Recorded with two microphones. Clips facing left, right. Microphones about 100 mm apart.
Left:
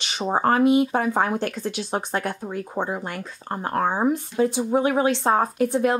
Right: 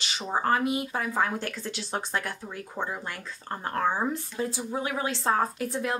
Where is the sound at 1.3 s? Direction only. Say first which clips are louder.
Left 7 dB; 55° left (ahead or behind).